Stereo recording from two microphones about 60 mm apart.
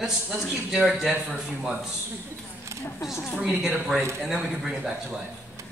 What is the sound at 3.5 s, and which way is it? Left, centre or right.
A man's voice, centre.